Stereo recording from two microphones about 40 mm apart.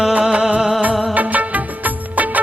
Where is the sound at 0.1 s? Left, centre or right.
Right.